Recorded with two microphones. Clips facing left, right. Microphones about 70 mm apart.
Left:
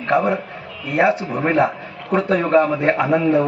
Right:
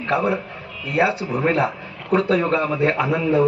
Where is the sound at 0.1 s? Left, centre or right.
Left.